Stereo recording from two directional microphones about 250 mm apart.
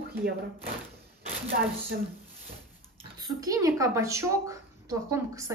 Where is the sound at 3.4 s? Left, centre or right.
Centre.